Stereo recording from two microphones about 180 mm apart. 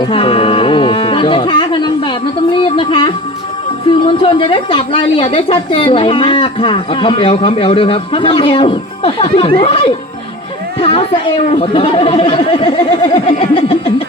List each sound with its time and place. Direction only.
0.0 s music: 30° left (ahead or behind)
4.0 s a woman's voice: 30° left (ahead or behind)
10.8 s a sound: 30° left (ahead or behind)
11.5 s speech: 35° left (ahead or behind)